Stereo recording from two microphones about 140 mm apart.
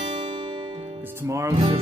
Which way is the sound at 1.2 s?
20° right (ahead or behind).